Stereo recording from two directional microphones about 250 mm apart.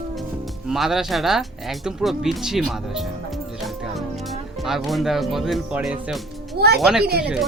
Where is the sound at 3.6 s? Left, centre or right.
Centre.